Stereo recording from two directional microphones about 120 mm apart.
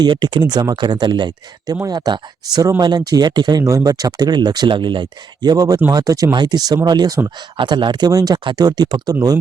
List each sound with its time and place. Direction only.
0.0 s speech: 40° right (ahead or behind)
3.6 s speech: 25° right (ahead or behind)